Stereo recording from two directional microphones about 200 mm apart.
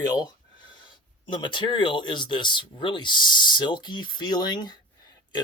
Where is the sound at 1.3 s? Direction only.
25° left (ahead or behind).